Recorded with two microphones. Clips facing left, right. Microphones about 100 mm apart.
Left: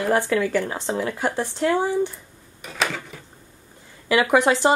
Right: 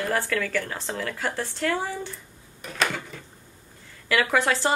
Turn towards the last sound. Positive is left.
turn(degrees=20)  # may be behind; listen again after turning